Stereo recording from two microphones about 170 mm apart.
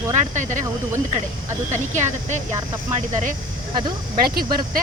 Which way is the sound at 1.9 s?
45° right (ahead or behind).